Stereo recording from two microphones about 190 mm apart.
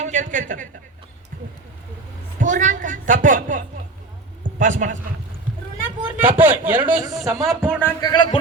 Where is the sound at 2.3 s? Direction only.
45° right (ahead or behind).